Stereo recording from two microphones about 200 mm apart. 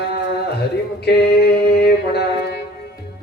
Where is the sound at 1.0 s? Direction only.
55° left (ahead or behind).